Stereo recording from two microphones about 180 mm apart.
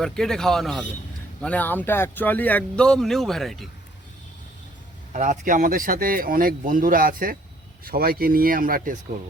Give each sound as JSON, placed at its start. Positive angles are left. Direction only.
{"t": 0.0, "sound": "speech", "side_deg": 5}
{"t": 5.1, "sound": "speech", "side_deg": -45}